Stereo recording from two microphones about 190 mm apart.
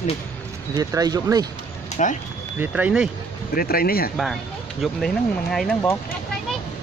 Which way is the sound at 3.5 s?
50° left (ahead or behind).